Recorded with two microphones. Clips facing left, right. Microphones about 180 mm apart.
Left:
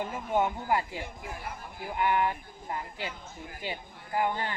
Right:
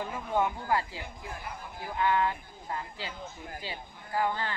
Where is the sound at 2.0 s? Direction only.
15° left (ahead or behind).